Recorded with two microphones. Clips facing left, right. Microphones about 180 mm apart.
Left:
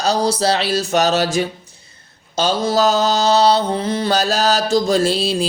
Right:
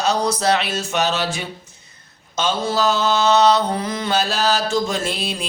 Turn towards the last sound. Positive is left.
turn(degrees=30)  # may be behind; listen again after turning